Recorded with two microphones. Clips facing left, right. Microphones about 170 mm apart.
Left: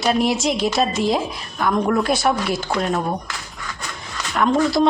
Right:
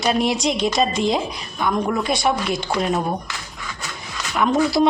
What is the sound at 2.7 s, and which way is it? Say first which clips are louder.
Speech: right 1 dB; 15° right (ahead or behind).